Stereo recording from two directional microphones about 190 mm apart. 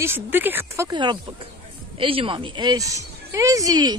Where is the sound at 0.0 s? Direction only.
10° right (ahead or behind).